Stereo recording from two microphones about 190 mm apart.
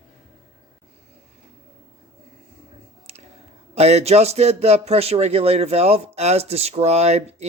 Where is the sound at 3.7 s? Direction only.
35° right (ahead or behind).